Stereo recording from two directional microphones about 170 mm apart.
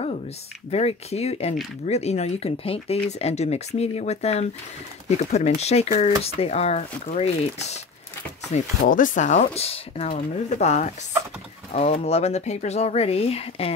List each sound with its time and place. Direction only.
0.7 s speech: 35° left (ahead or behind)